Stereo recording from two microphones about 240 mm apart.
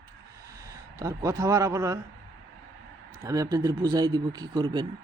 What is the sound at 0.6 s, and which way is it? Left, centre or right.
Speech, centre.